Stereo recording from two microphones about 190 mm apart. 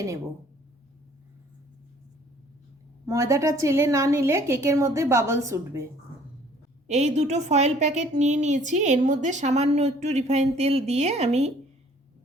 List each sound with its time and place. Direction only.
3.1 s a woman's voice: 15° right (ahead or behind)
6.8 s a woman's voice: 35° right (ahead or behind)